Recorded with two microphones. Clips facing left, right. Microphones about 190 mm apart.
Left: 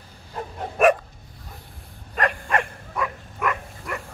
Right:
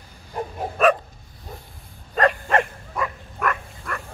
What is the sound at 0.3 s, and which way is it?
Bow-wow, 15° right (ahead or behind).